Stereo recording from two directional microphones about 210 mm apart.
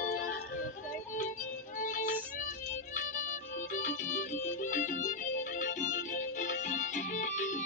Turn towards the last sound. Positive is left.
turn(degrees=35)  # may be behind; listen again after turning